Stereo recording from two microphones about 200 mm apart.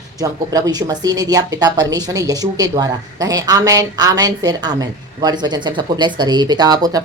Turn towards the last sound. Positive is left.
turn(degrees=-20)  # may be behind; listen again after turning